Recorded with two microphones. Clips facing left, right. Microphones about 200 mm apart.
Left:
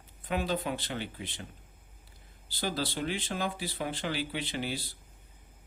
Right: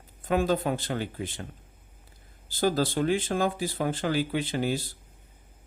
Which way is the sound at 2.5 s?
45° right (ahead or behind).